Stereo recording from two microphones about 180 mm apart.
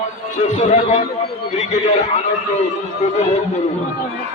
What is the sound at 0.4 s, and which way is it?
Speech, 35° left (ahead or behind).